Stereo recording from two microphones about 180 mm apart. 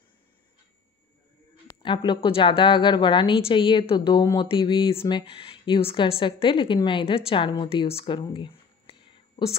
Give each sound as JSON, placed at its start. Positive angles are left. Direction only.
{"t": 1.7, "sound": "speech", "side_deg": 25}